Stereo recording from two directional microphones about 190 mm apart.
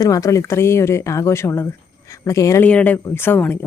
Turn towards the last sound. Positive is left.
turn(degrees=10)  # may be behind; listen again after turning